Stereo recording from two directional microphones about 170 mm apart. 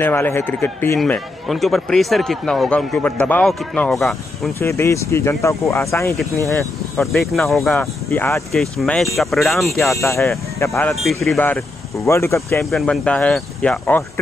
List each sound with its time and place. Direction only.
0.0 s speech: 10° left (ahead or behind)
4.6 s speech: 15° left (ahead or behind)
6.6 s speech: centre (ahead or behind)
8.1 s speech: 15° left (ahead or behind)
8.5 s speech: centre (ahead or behind)
10.6 s speech: 15° left (ahead or behind)
12.6 s speech: centre (ahead or behind)